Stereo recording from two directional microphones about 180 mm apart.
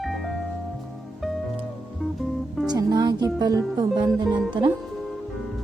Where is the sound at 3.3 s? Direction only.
20° right (ahead or behind).